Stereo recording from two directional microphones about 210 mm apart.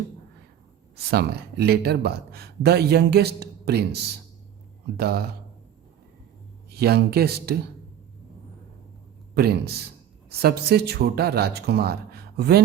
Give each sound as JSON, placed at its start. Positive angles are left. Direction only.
{"t": 0.9, "sound": "speech", "side_deg": -50}
{"t": 6.7, "sound": "speech", "side_deg": -50}
{"t": 9.3, "sound": "speech", "side_deg": -50}